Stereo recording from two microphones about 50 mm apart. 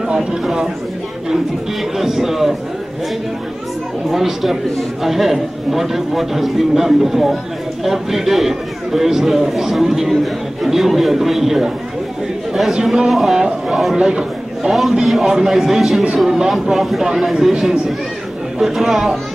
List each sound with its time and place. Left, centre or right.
0.4 s a man's voice: centre
2.0 s a man's voice: centre
4.1 s a man's voice: centre
12.8 s a man's voice: centre
14.8 s a man's voice: centre
16.7 s a man's voice: centre